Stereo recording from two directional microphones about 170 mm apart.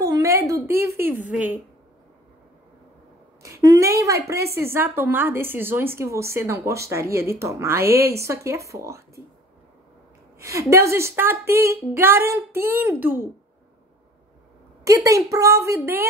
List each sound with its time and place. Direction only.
0.0 s a sound: 20° right (ahead or behind)
0.7 s speech: 15° right (ahead or behind)
3.7 s a woman's voice: 20° right (ahead or behind)
10.4 s a woman's voice: 20° right (ahead or behind)
15.0 s a woman's voice: 20° right (ahead or behind)